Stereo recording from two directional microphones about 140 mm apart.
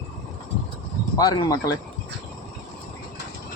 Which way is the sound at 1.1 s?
30° left (ahead or behind).